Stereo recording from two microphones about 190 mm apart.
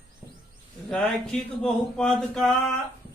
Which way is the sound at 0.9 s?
5° left (ahead or behind).